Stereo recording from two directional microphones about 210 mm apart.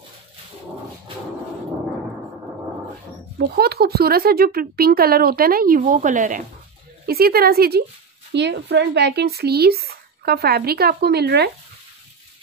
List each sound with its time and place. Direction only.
3.3 s speech: 45° right (ahead or behind)